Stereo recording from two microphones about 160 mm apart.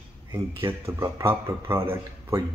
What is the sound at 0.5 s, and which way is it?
Speech, 15° right (ahead or behind).